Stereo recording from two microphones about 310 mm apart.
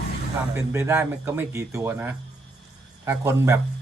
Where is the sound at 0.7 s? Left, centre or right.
Centre.